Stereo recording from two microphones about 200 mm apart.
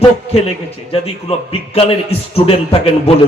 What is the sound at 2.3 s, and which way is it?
Speech, 30° left (ahead or behind).